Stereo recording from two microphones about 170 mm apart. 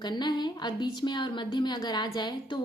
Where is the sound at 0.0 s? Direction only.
25° left (ahead or behind).